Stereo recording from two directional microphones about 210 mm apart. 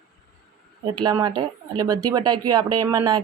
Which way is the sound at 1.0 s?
20° right (ahead or behind).